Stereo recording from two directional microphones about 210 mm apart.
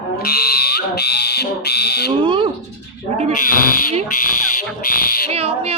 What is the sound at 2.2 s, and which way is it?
Speech, 25° right (ahead or behind).